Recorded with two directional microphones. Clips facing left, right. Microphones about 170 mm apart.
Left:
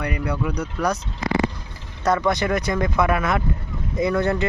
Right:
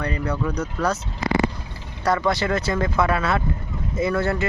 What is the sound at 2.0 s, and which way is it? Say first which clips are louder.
Speech: left 1 dB; 20° left (ahead or behind).